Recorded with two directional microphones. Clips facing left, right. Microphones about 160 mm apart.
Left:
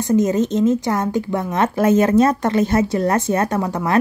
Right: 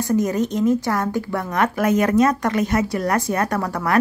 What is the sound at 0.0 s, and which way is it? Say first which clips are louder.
A woman's voice: left 3 dB; 20° left (ahead or behind).